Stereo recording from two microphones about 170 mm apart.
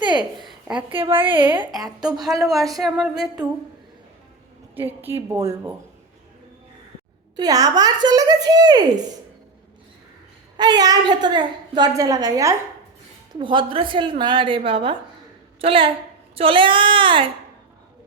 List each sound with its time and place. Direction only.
0.0 s a sound: 25° right (ahead or behind)
0.3 s a sound: 5° right (ahead or behind)
0.9 s child singing: 30° right (ahead or behind)
1.8 s a woman's voice: 25° right (ahead or behind)
2.2 s a woman's voice: centre (ahead or behind)
4.8 s a woman's voice: 10° right (ahead or behind)
7.3 s a woman's voice: 20° right (ahead or behind)
10.6 s a woman's voice: 25° right (ahead or behind)
15.6 s child singing: 30° right (ahead or behind)